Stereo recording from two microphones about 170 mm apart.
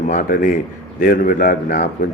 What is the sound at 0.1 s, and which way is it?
Speech, 55° left (ahead or behind).